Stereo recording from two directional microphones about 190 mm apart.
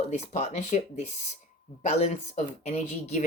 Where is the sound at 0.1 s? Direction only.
35° left (ahead or behind).